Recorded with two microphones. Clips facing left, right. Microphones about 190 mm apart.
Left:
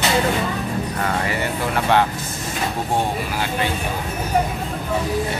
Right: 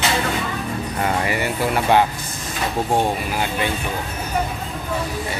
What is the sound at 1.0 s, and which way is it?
Speech, 15° right (ahead or behind).